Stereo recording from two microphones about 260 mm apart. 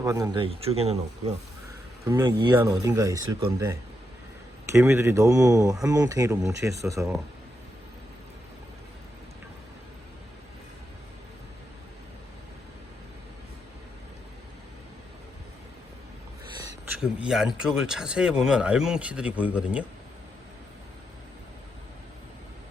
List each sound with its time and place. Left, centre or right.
0.0 s speech: centre
2.0 s speech: centre
17.0 s speech: centre